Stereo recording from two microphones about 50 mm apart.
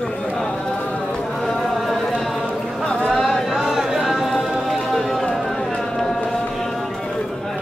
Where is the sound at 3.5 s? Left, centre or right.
Centre.